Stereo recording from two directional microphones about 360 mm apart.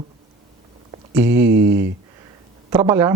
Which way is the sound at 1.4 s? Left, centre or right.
Right.